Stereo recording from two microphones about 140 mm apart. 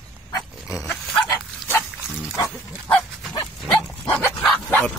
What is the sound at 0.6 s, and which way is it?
Pig, centre (ahead or behind).